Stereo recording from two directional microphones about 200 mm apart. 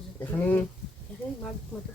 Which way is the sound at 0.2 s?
10° left (ahead or behind).